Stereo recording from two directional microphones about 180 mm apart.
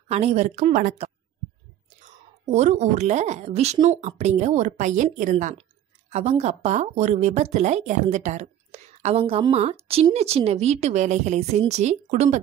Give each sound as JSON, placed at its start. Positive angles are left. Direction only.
{"t": 0.1, "sound": "a woman's voice", "side_deg": -35}
{"t": 2.5, "sound": "a woman's voice", "side_deg": -40}